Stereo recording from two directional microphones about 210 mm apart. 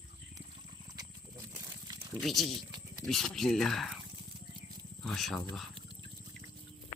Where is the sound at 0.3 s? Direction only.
20° right (ahead or behind).